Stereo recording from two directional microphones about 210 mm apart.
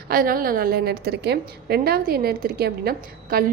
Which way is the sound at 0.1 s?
45° right (ahead or behind).